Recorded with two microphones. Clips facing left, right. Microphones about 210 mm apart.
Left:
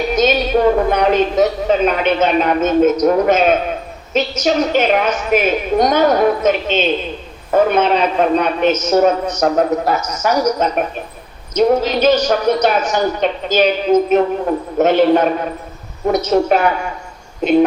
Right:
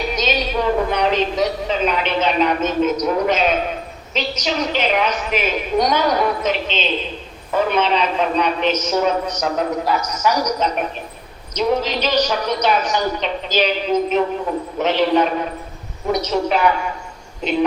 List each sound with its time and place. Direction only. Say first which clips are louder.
0.2 s a woman's voice: left 9 dB; 50° left (ahead or behind)